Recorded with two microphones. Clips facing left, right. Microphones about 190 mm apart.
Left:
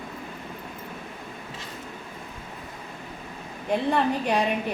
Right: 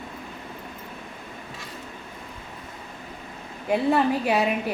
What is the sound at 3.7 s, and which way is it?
Speech, 5° right (ahead or behind).